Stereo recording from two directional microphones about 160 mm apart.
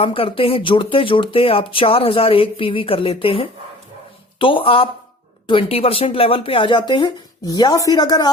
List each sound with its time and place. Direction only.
0.0 s speech: 35° left (ahead or behind)